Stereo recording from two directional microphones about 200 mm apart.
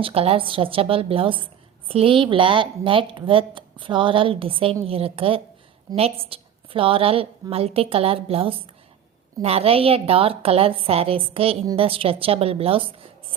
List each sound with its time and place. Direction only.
0.0 s a woman's voice: 30° right (ahead or behind)